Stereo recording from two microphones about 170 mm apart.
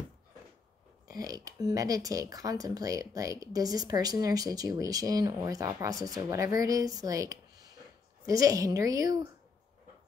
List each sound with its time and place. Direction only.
1.0 s speech: 20° right (ahead or behind)